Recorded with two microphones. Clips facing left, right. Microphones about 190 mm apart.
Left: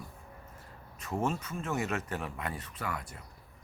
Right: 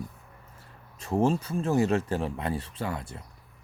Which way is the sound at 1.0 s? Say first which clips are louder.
Right 8 dB; 30° right (ahead or behind).